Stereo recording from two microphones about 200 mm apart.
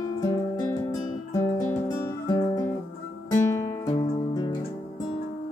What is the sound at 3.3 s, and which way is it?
Music, 15° left (ahead or behind).